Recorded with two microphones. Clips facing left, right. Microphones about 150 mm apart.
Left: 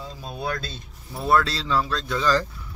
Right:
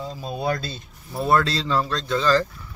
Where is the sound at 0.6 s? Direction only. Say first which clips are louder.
Right 3 dB; 5° right (ahead or behind); by 2.5 s 10° left (ahead or behind).